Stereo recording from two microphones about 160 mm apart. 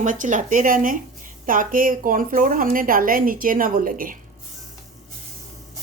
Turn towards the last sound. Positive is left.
turn(degrees=-60)  # may be behind; listen again after turning